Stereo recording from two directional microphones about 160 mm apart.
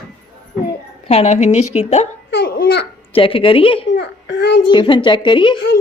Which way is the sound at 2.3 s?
85° left.